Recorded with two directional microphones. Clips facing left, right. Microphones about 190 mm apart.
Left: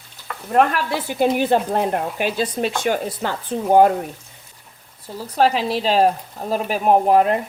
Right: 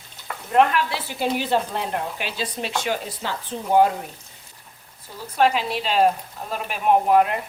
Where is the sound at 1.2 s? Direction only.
50° left (ahead or behind).